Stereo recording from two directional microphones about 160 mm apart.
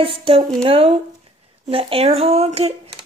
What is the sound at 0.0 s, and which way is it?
Speech, 35° right (ahead or behind).